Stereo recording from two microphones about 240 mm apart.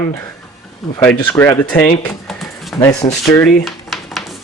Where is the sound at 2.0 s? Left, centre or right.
Centre.